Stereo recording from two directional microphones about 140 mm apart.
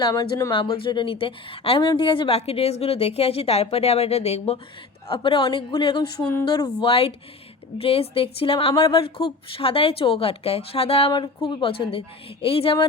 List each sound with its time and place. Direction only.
0.0 s speech: 25° left (ahead or behind)
0.5 s a woman's voice: 40° left (ahead or behind)
6.8 s a woman's voice: 40° left (ahead or behind)